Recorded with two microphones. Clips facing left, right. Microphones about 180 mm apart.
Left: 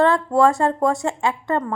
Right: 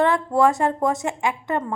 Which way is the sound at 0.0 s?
20° right (ahead or behind).